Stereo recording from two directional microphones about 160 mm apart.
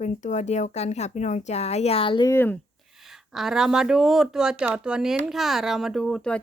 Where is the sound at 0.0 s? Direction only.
50° left (ahead or behind); by 2.3 s 30° left (ahead or behind).